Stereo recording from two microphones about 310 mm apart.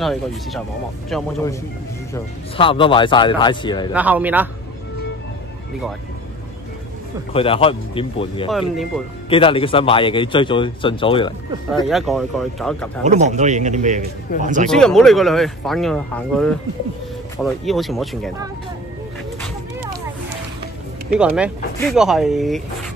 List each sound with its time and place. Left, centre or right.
0.0 s speech: centre
3.9 s speech: centre
7.3 s speech: centre
8.5 s speech: centre
9.3 s speech: centre
11.7 s speech: centre
13.0 s a man's voice: right
14.7 s speech: centre
21.7 s speech: centre